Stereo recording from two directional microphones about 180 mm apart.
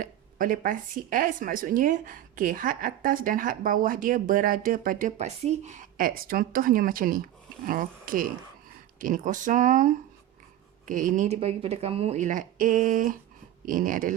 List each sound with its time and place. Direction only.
0.0 s speech: 50° right (ahead or behind)